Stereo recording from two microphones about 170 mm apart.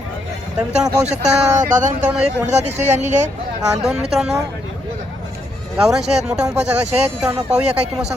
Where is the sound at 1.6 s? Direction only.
50° right (ahead or behind).